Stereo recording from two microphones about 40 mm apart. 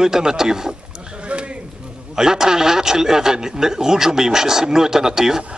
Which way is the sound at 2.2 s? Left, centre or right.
Centre.